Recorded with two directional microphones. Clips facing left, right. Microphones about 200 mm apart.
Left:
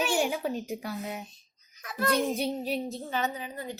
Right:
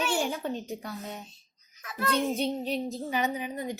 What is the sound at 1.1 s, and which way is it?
Speech, 15° left (ahead or behind).